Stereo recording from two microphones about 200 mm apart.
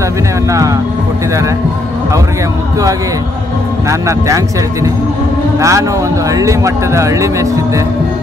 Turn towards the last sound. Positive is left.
turn(degrees=-15)  # may be behind; listen again after turning